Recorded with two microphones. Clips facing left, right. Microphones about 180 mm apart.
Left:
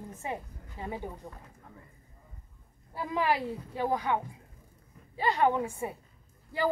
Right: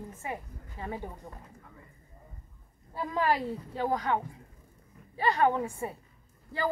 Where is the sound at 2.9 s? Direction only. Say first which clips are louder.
Right 1 dB; 5° left (ahead or behind).